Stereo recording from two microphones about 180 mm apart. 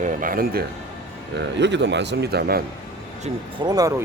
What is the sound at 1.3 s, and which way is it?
Speech, 75° right (ahead or behind).